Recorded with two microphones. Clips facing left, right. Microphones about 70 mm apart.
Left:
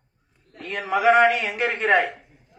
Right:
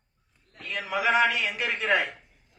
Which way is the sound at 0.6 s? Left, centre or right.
Left.